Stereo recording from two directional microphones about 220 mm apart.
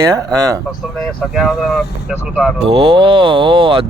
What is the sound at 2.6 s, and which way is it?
Speech, 25° right (ahead or behind).